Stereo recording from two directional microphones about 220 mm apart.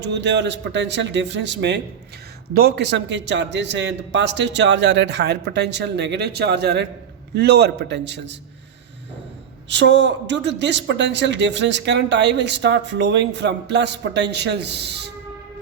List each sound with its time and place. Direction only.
0.0 s speech: 50° right (ahead or behind)
9.6 s speech: 55° right (ahead or behind)